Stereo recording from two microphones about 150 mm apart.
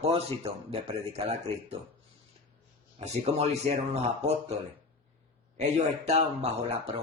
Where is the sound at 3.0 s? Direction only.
45° right (ahead or behind).